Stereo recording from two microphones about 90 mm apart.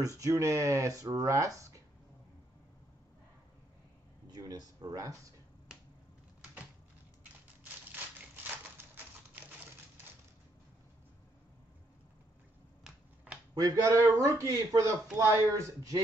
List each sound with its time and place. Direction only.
0.2 s speech: 35° right (ahead or behind)
4.3 s speech: 45° right (ahead or behind)
8.7 s typewriter: 20° right (ahead or behind)
13.3 s a sound: 15° right (ahead or behind)
13.6 s speech: 40° right (ahead or behind)